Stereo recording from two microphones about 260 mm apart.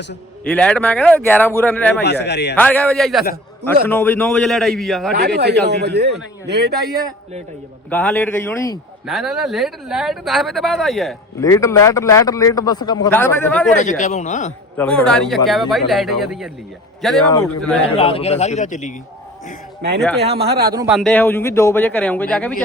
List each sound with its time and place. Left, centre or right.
0.4 s speech: centre
2.0 s a man's voice: left
2.6 s speech: centre
5.1 s speech: right
7.9 s a man's voice: centre
9.0 s speech: centre
11.3 s a man's voice: centre
13.7 s a man's voice: left
14.8 s speech: centre
17.8 s a man's voice: left
20.2 s speech: right
20.5 s speech: right
20.7 s a man's voice: centre